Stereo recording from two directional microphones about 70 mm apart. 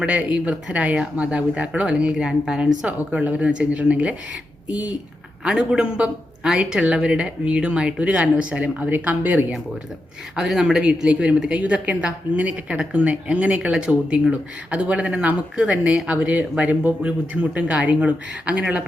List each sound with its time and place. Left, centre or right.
0.0 s speech: centre
2.1 s speech: centre
2.8 s speech: right
4.7 s speech: left
5.5 s speech: centre
10.3 s speech: centre